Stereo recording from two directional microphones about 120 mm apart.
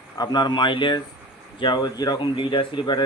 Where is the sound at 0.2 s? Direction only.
35° left (ahead or behind).